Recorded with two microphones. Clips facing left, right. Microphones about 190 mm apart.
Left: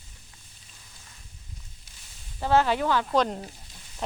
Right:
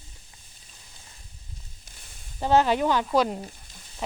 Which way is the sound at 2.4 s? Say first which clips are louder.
Right 2 dB; 15° right (ahead or behind).